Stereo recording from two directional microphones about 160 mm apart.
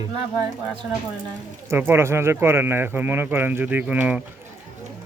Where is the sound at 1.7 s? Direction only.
15° right (ahead or behind).